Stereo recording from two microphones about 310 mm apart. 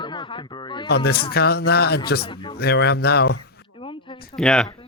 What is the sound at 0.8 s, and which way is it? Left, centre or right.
A man's voice, left.